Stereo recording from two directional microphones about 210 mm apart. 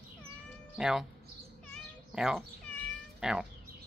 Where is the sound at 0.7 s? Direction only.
Centre (ahead or behind).